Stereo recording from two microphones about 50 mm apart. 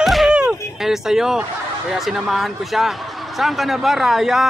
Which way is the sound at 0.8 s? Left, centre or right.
Centre.